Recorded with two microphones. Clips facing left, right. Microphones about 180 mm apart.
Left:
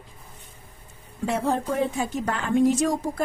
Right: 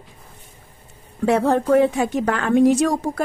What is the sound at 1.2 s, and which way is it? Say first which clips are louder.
A woman's voice: right 7 dB; 70° right (ahead or behind).